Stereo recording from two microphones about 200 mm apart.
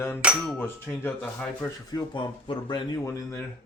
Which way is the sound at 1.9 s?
20° left (ahead or behind).